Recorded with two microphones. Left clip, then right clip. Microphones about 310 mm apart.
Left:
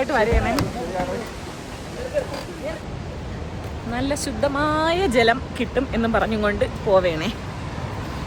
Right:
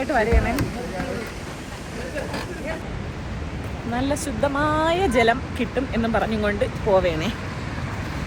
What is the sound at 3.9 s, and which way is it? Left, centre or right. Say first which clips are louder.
Speech: even; centre.